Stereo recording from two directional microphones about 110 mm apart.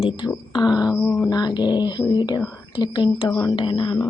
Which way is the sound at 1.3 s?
40° left (ahead or behind).